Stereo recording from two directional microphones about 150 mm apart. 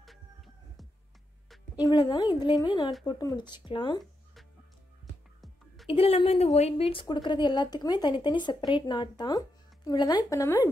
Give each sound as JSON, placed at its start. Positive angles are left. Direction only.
{"t": 0.0, "sound": "music", "side_deg": 0}
{"t": 1.8, "sound": "speech", "side_deg": 30}
{"t": 5.9, "sound": "a woman's voice", "side_deg": 40}